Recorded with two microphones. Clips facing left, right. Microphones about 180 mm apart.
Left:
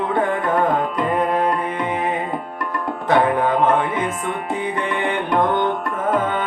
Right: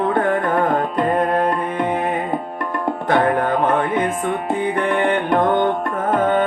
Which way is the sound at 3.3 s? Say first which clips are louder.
Even; 55° right (ahead or behind).